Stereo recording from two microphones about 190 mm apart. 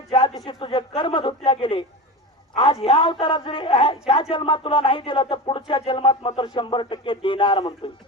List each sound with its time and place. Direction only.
0.1 s speech: 25° left (ahead or behind)